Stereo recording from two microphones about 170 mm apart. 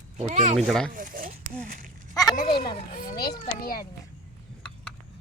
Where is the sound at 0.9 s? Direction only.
55° right (ahead or behind).